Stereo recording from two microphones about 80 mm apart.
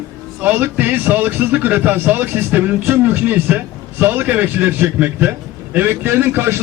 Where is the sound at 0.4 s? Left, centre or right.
Right.